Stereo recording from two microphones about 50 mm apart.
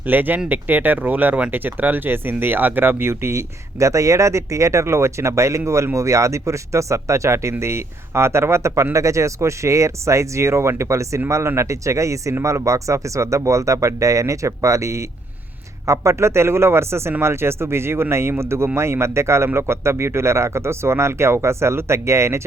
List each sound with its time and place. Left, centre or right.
0.1 s speech: right
7.6 s speech: right
15.9 s speech: right